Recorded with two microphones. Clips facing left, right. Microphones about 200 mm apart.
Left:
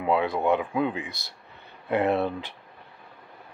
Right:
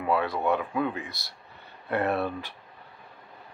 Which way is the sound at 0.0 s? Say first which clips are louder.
Left 2 dB; 20° left (ahead or behind).